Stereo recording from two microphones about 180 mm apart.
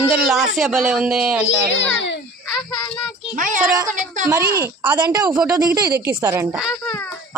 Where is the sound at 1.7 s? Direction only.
90° left.